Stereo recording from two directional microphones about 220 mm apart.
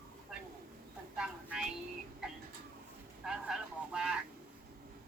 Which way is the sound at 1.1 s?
5° right (ahead or behind).